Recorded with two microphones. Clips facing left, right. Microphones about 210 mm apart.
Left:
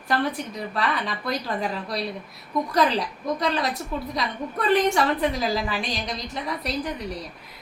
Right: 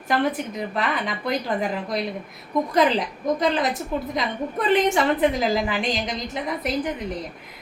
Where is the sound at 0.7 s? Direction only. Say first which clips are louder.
Left 1 dB; 20° right (ahead or behind).